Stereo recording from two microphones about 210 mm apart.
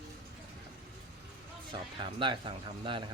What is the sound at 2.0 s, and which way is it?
Speech, 20° right (ahead or behind).